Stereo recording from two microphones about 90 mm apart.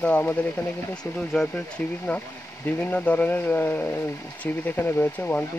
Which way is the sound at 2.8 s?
15° left (ahead or behind).